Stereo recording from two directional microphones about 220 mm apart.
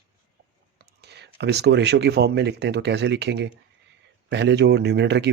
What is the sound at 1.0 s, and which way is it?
Speech, 50° right (ahead or behind).